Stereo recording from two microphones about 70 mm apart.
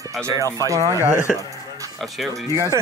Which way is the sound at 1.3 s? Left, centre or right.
Centre.